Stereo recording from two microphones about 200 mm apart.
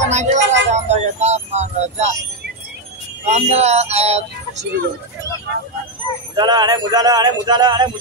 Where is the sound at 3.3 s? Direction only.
35° right (ahead or behind).